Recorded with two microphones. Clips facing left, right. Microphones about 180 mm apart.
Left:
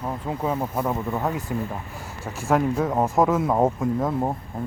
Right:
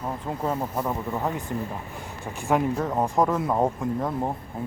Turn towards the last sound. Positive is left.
turn(degrees=5)  # may be behind; listen again after turning